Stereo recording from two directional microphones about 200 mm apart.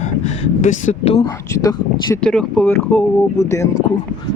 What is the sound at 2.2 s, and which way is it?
Speech, 5° left (ahead or behind).